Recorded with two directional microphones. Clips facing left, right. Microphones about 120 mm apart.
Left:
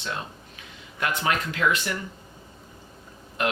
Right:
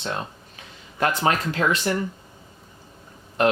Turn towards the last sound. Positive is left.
turn(degrees=-35)  # may be behind; listen again after turning